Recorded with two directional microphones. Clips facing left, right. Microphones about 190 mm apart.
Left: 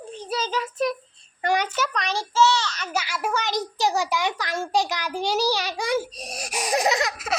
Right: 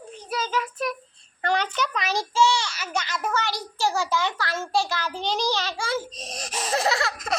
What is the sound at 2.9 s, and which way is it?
A child's voice, 10° left (ahead or behind).